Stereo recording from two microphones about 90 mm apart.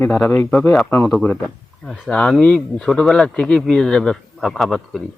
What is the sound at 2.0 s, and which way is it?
A man's voice, 10° left (ahead or behind).